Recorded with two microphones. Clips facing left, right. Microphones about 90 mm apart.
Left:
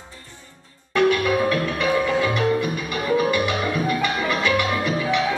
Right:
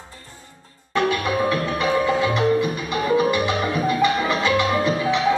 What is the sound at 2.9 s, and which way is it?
Music, 25° right (ahead or behind).